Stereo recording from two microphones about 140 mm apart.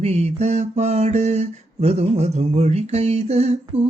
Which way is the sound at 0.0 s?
50° right (ahead or behind).